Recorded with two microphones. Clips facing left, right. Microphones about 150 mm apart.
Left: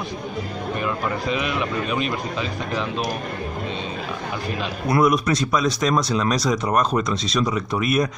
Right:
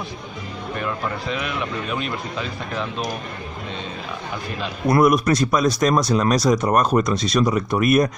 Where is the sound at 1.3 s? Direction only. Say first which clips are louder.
Left 2 dB; 10° left (ahead or behind).